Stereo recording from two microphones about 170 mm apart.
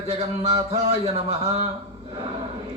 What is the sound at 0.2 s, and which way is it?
A man's voice, 35° right (ahead or behind).